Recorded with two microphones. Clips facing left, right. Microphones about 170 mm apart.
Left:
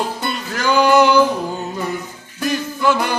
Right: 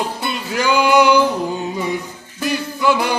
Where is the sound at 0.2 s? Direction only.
10° right (ahead or behind).